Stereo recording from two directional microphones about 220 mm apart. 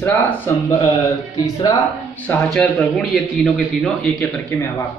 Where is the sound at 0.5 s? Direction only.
15° left (ahead or behind).